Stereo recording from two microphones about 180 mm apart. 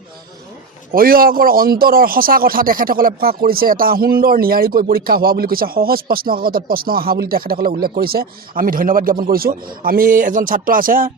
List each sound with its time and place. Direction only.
0.9 s a man's voice: 55° right (ahead or behind)